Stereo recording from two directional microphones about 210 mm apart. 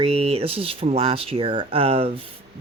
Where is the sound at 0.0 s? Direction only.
30° right (ahead or behind).